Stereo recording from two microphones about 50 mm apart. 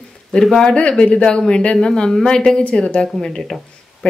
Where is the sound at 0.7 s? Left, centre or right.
Left.